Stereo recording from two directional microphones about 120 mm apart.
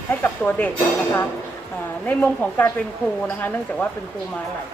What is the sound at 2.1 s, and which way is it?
Speech, 10° left (ahead or behind).